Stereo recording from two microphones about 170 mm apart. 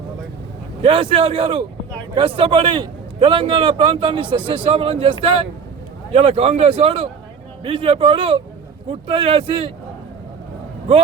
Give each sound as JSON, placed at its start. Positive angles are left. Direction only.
{"t": 0.8, "sound": "a man's voice", "side_deg": -30}
{"t": 6.1, "sound": "a man's voice", "side_deg": -35}